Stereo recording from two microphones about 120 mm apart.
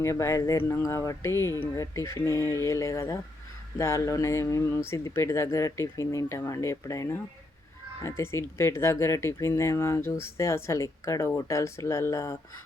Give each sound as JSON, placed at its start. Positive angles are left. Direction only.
{"t": 0.0, "sound": "speech", "side_deg": 25}